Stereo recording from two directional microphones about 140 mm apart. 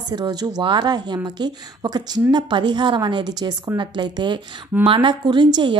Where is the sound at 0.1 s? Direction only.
30° right (ahead or behind).